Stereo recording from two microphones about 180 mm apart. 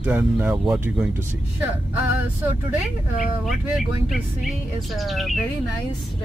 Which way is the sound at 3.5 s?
Centre (ahead or behind).